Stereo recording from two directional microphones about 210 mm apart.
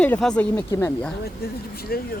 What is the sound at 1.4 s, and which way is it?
Speech, 50° left (ahead or behind).